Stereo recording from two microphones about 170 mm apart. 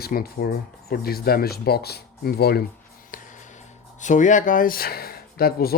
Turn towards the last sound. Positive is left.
turn(degrees=65)  # may be behind; listen again after turning